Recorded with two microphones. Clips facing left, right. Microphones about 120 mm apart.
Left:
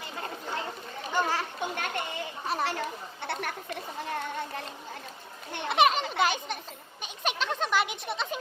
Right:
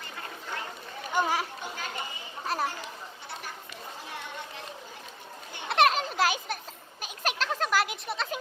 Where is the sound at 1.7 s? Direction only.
65° left (ahead or behind).